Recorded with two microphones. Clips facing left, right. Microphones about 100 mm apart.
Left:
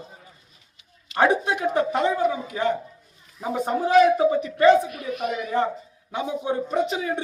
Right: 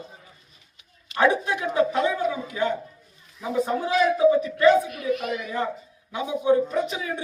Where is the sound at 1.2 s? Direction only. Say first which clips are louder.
Left 1 dB; 45° left (ahead or behind).